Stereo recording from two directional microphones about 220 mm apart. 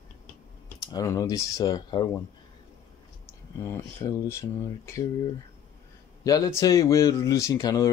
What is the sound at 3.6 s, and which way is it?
Speech, 15° left (ahead or behind).